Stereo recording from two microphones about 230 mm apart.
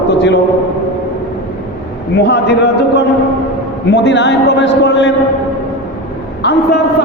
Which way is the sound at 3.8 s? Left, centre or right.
Left.